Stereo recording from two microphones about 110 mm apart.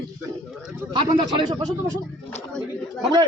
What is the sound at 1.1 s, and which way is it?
Speech, 45° right (ahead or behind).